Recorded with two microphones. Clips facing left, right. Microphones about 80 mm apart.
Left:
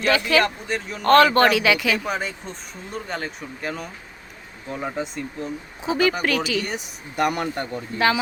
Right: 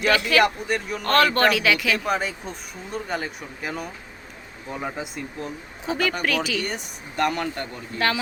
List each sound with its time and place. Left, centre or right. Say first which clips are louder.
0.0 s speech: even; centre
7.3 s speech: left 2 dB; centre
7.9 s speech: left 3 dB; centre